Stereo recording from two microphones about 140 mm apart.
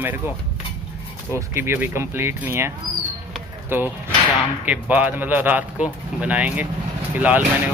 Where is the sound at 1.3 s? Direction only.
15° right (ahead or behind).